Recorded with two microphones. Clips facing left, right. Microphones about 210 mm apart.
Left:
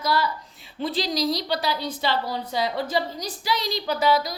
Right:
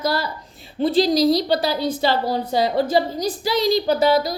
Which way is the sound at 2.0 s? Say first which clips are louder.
Right 6 dB; 35° right (ahead or behind).